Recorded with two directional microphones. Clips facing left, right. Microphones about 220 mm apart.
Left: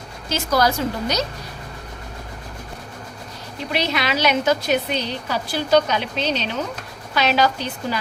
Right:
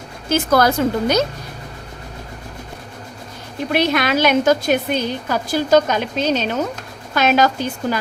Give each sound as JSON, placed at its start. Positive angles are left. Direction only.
{"t": 0.3, "sound": "a woman's voice", "side_deg": -55}
{"t": 3.7, "sound": "a woman's voice", "side_deg": -50}